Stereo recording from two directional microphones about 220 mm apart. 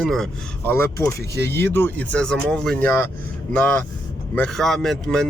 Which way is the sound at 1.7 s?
10° left (ahead or behind).